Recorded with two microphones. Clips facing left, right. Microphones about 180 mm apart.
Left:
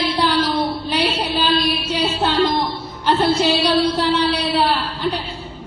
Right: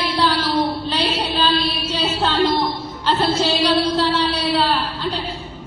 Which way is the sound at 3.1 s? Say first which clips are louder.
Left 2 dB; 15° left (ahead or behind).